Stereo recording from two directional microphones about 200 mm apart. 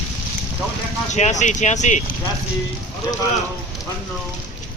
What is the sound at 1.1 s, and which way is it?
Speech, 35° left (ahead or behind).